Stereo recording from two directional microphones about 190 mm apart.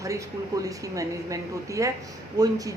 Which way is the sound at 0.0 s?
15° right (ahead or behind).